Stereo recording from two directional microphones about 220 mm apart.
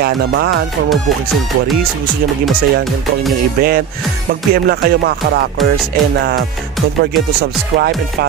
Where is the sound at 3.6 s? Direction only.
45° right (ahead or behind).